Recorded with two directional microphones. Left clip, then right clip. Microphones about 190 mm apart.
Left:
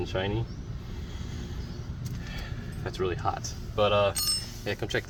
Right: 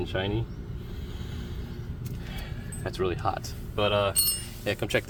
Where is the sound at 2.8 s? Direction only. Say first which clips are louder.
Right 1 dB; 40° right (ahead or behind).